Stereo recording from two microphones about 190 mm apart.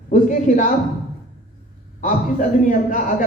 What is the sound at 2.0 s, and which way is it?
A man's voice, 45° left (ahead or behind).